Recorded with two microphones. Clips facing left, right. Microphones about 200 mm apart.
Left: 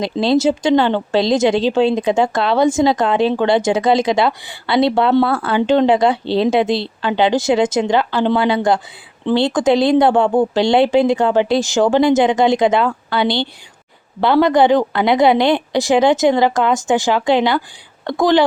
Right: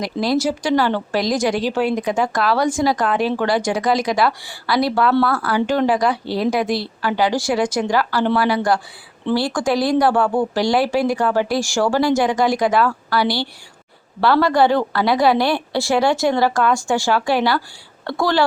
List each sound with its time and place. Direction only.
0.0 s a woman's voice: 25° left (ahead or behind)